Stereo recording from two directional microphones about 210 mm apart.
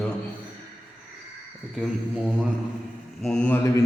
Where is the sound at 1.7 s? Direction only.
5° right (ahead or behind).